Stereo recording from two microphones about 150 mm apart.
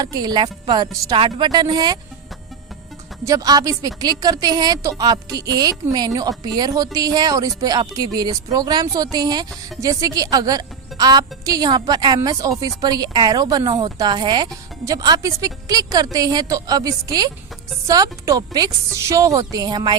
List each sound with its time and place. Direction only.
0.0 s a woman's voice: 25° right (ahead or behind)
3.2 s a woman's voice: 25° right (ahead or behind)